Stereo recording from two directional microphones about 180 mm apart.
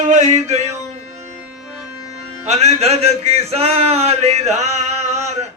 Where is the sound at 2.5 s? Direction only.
40° right (ahead or behind).